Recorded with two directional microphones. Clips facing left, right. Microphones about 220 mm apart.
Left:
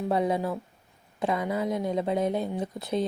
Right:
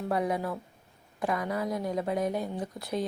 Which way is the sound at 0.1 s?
25° left (ahead or behind).